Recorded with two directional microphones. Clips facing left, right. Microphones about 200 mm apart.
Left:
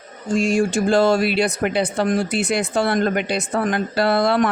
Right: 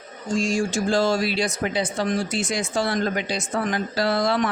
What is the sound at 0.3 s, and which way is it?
Speech, 60° left (ahead or behind).